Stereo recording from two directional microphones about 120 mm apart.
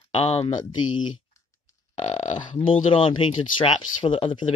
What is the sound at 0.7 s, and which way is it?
Speech, 40° left (ahead or behind).